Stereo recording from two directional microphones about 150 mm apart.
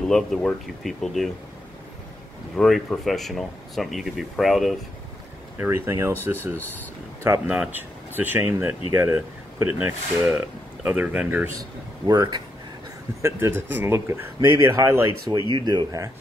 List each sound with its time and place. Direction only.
0.1 s speech: 5° left (ahead or behind)
2.5 s speech: centre (ahead or behind)
5.6 s speech: 15° right (ahead or behind)
12.1 s speech: 25° right (ahead or behind)
13.2 s speech: 15° right (ahead or behind)